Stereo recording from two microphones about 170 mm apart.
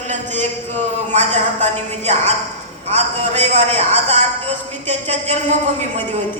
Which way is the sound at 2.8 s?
40° right (ahead or behind).